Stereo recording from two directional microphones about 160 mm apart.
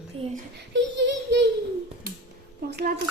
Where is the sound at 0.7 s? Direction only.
90° right.